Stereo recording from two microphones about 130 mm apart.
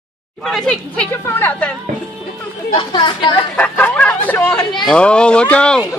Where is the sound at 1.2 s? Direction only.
15° left (ahead or behind).